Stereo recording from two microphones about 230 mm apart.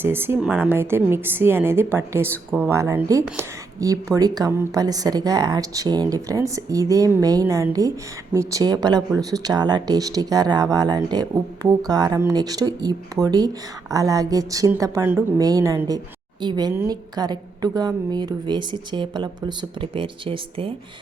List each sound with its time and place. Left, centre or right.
0.0 s a woman's voice: centre